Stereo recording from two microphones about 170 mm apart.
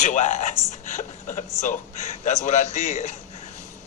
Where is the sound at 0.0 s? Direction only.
45° left (ahead or behind).